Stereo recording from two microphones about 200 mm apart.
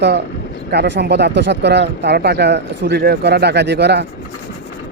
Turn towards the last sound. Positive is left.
turn(degrees=-55)  # may be behind; listen again after turning